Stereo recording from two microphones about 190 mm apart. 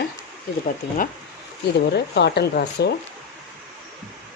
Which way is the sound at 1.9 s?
60° left (ahead or behind).